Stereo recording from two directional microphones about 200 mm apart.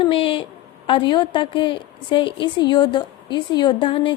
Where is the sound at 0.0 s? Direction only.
25° left (ahead or behind).